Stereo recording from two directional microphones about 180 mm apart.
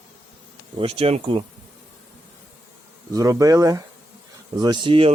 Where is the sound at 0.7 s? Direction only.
30° right (ahead or behind).